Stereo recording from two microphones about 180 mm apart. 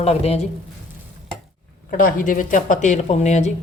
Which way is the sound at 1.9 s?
50° left (ahead or behind).